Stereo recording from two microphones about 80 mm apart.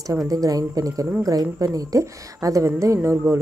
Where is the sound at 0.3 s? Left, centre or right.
Right.